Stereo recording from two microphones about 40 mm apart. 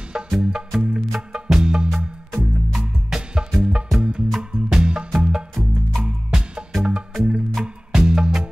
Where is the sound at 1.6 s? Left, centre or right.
Right.